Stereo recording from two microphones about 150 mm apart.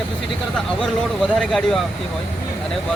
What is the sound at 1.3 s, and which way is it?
Speech, centre (ahead or behind).